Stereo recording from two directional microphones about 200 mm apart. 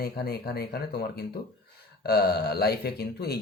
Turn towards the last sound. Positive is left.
turn(degrees=50)  # may be behind; listen again after turning